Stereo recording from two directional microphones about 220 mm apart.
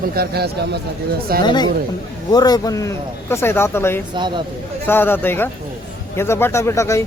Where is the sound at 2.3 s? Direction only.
15° left (ahead or behind).